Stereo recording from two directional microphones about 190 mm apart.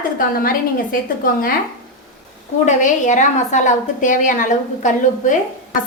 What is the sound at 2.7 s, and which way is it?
A woman's voice, 40° left (ahead or behind).